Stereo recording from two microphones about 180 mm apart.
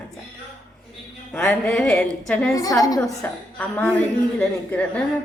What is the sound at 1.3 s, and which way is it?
Speech, 5° left (ahead or behind).